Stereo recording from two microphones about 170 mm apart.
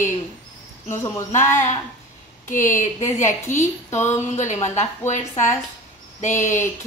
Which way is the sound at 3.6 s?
15° left (ahead or behind).